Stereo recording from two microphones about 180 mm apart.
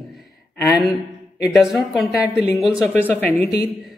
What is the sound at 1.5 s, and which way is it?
A man's voice, centre (ahead or behind).